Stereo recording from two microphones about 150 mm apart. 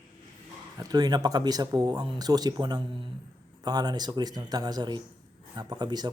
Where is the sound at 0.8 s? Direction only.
25° right (ahead or behind).